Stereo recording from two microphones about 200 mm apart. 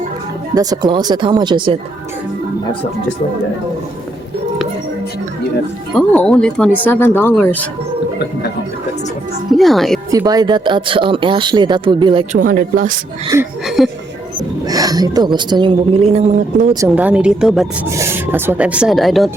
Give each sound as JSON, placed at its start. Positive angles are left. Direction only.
{"t": 0.5, "sound": "speech", "side_deg": -20}
{"t": 5.9, "sound": "speech", "side_deg": 5}
{"t": 9.5, "sound": "speech", "side_deg": 0}
{"t": 10.1, "sound": "speech", "side_deg": -20}
{"t": 12.3, "sound": "speech", "side_deg": -40}
{"t": 13.3, "sound": "speech", "side_deg": -15}
{"t": 13.7, "sound": "speech", "side_deg": 0}
{"t": 14.7, "sound": "speech", "side_deg": -20}
{"t": 16.8, "sound": "speech", "side_deg": -5}
{"t": 17.8, "sound": "speech", "side_deg": -15}